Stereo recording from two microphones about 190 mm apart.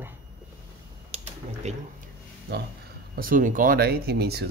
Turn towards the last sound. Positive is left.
turn(degrees=-55)  # may be behind; listen again after turning